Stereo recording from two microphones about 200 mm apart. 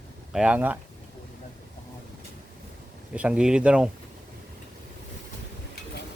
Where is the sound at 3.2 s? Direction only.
5° right (ahead or behind).